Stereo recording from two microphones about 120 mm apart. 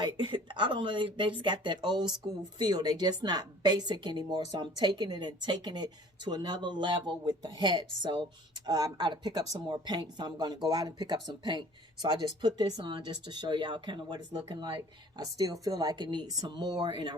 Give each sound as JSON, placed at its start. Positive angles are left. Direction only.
{"t": 0.0, "sound": "speech", "side_deg": -40}
{"t": 15.2, "sound": "speech", "side_deg": -30}